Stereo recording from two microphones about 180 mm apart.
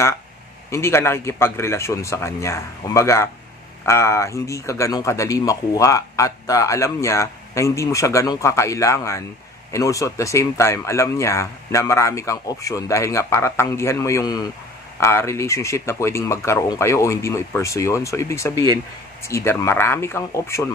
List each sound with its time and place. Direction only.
0.7 s speech: 15° left (ahead or behind)